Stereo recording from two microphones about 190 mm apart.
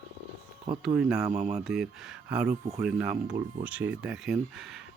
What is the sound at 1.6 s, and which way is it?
Speech, 5° right (ahead or behind).